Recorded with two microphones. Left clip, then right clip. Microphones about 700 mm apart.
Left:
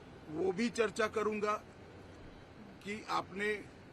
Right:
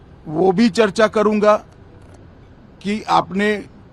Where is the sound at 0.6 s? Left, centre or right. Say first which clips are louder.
Right 17 dB; right.